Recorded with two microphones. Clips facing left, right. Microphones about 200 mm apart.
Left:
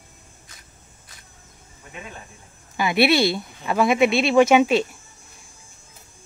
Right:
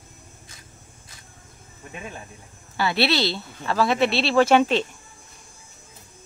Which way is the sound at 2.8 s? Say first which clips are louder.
Left 4 dB; 15° left (ahead or behind).